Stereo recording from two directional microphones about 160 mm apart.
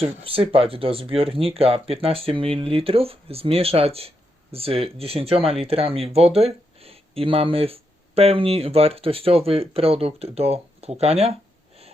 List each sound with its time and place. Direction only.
0.0 s speech: 35° right (ahead or behind)